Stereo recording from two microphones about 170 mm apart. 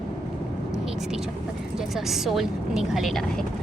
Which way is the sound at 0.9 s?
5° right (ahead or behind).